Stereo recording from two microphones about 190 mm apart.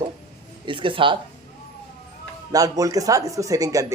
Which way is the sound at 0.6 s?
25° right (ahead or behind).